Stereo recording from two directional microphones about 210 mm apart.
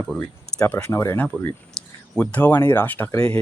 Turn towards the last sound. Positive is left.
turn(degrees=10)  # may be behind; listen again after turning